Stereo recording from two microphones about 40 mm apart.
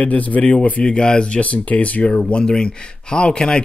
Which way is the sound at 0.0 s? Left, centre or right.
Left.